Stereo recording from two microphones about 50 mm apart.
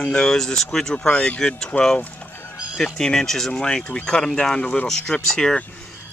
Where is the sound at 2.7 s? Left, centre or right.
Centre.